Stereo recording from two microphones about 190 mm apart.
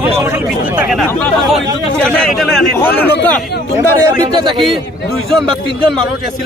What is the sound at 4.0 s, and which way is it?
Speech, 20° right (ahead or behind).